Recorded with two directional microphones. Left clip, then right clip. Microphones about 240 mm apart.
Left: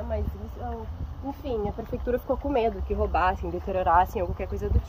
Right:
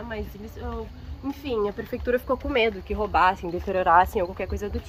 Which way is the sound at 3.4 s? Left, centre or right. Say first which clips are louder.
Right 2 dB; right.